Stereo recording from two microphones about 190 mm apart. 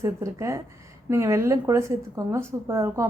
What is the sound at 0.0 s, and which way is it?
Speech, 15° right (ahead or behind).